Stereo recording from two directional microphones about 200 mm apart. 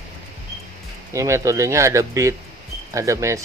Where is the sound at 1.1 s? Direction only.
15° right (ahead or behind).